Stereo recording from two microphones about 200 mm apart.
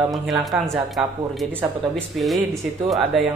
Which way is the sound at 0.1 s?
Centre (ahead or behind).